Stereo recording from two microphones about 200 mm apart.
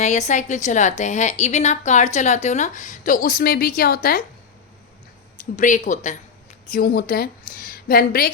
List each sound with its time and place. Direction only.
0.0 s a woman's voice: 35° left (ahead or behind)
5.5 s a woman's voice: 40° left (ahead or behind)